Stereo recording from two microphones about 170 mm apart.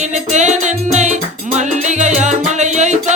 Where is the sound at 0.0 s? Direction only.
45° right (ahead or behind).